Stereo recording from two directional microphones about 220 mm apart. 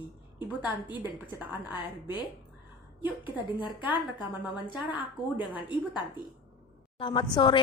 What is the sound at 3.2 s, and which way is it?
Speech, 20° left (ahead or behind).